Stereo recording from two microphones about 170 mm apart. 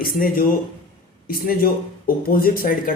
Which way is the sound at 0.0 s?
60° left (ahead or behind).